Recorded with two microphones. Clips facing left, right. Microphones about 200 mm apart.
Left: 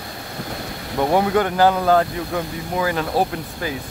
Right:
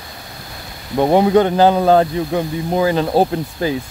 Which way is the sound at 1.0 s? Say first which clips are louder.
Right 5 dB; 25° right (ahead or behind).